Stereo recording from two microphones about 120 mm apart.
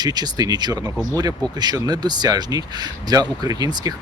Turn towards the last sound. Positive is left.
turn(degrees=-35)  # may be behind; listen again after turning